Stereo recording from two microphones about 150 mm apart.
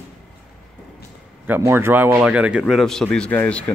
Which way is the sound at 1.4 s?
15° right (ahead or behind).